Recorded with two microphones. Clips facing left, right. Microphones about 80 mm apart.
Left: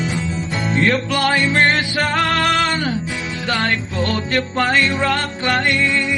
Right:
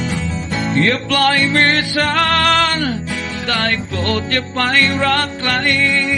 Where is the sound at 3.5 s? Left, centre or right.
Centre.